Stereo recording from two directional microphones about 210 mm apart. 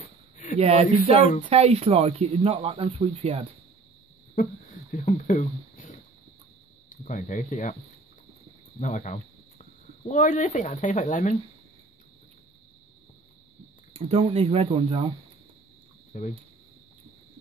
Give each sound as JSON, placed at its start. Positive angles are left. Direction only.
{"t": 0.6, "sound": "speech", "side_deg": -30}
{"t": 1.1, "sound": "speech", "side_deg": 40}
{"t": 1.5, "sound": "speech", "side_deg": -30}
{"t": 4.9, "sound": "speech", "side_deg": 35}
{"t": 8.7, "sound": "speech", "side_deg": 35}
{"t": 13.9, "sound": "speech", "side_deg": -30}
{"t": 16.1, "sound": "speech", "side_deg": 35}